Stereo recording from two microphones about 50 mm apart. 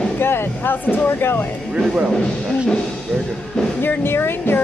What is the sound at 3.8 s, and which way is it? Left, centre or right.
Speech, left.